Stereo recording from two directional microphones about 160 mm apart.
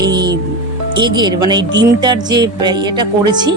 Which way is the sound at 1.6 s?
90° right.